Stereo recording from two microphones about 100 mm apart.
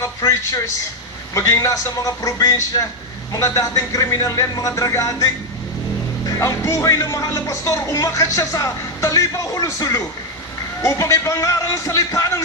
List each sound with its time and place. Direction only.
0.0 s speech: 30° left (ahead or behind)
6.3 s speech: 30° left (ahead or behind)